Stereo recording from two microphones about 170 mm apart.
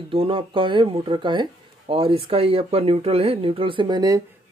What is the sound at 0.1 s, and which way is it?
Speech, 30° right (ahead or behind).